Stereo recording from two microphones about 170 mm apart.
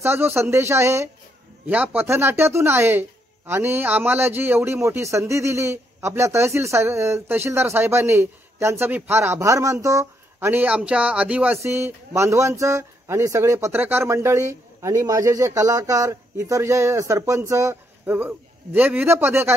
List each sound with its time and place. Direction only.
0.0 s a man's voice: 15° right (ahead or behind)